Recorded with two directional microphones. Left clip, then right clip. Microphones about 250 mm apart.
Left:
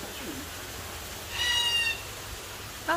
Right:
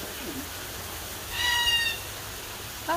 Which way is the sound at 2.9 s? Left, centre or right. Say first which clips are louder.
Even; centre.